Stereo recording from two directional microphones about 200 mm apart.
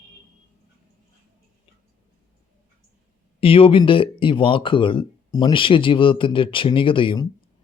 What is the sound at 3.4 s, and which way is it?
Speech, 30° left (ahead or behind).